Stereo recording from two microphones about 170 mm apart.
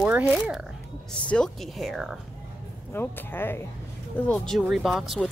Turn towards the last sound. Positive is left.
turn(degrees=0)  # may be behind; listen again after turning